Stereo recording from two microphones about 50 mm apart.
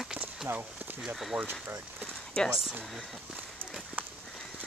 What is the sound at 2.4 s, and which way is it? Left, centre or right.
Speech, centre.